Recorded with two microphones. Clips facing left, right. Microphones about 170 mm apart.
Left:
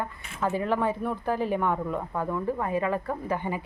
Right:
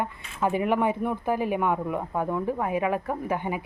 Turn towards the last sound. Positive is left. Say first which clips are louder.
# right 1 dB
turn(degrees=-10)  # may be behind; listen again after turning